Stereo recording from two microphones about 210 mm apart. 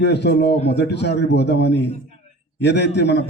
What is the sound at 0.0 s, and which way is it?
A man's voice, 55° left (ahead or behind).